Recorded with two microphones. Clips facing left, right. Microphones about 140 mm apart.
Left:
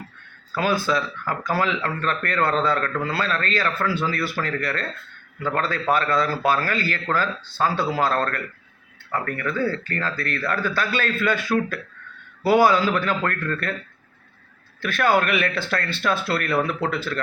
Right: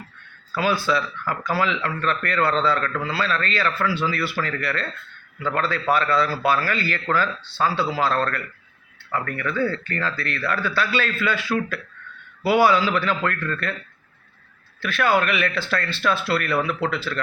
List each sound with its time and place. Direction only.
0.5 s speech: 45° left (ahead or behind)
14.8 s speech: 50° left (ahead or behind)